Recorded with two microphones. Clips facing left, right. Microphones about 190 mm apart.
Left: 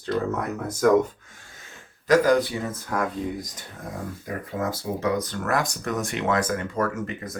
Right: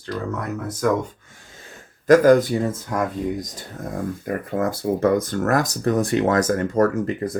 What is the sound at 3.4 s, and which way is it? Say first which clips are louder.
Speech: right 5 dB; 50° right (ahead or behind).